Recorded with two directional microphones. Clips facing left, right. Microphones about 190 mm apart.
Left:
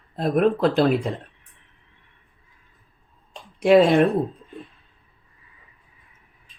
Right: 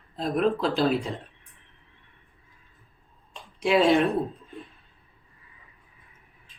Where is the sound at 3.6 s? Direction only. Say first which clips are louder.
Left 5 dB; 55° left (ahead or behind).